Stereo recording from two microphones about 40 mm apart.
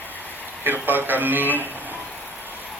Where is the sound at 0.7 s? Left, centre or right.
Right.